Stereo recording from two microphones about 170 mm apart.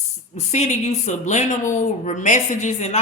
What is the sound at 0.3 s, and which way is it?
A woman's voice, 40° left (ahead or behind).